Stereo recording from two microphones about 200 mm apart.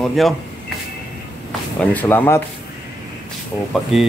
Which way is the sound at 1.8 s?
10° left (ahead or behind).